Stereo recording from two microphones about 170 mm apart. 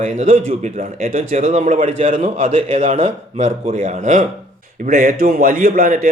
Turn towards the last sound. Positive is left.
turn(degrees=-55)  # may be behind; listen again after turning